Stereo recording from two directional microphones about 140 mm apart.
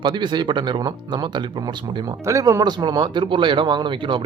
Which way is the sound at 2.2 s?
25° right (ahead or behind).